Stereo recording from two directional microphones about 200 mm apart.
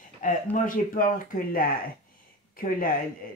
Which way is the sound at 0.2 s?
45° left (ahead or behind).